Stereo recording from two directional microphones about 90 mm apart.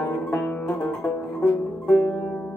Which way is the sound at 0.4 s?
15° left (ahead or behind).